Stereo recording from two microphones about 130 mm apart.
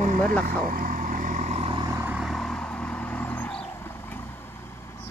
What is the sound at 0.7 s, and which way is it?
Vehicle, 85° right.